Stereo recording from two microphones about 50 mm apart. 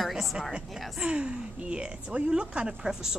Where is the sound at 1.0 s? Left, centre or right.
Right.